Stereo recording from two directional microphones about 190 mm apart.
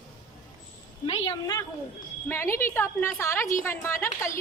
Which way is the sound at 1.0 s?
30° left (ahead or behind).